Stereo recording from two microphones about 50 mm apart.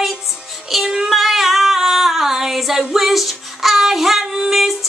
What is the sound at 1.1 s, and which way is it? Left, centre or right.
Child singing, centre.